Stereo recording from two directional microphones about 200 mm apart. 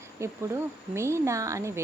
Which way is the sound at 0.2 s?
15° right (ahead or behind).